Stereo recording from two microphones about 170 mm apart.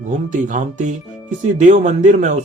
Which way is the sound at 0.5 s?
45° right (ahead or behind).